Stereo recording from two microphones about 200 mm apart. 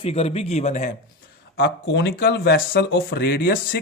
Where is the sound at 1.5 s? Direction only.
60° left (ahead or behind).